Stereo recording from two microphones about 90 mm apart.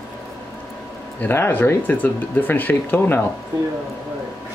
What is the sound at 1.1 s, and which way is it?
Speech, 25° left (ahead or behind).